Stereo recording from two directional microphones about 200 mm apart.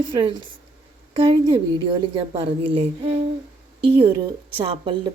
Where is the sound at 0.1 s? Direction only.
25° right (ahead or behind).